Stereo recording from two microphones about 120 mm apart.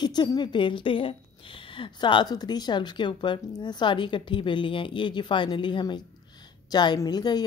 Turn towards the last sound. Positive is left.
turn(degrees=35)  # may be behind; listen again after turning